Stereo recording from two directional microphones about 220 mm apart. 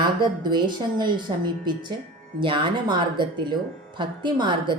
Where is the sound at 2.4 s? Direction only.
20° right (ahead or behind).